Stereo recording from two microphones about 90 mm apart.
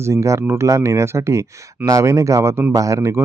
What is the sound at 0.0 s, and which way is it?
Speech, 35° right (ahead or behind).